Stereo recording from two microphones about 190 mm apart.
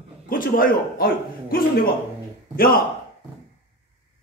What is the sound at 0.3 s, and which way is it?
A man's voice, 45° left (ahead or behind).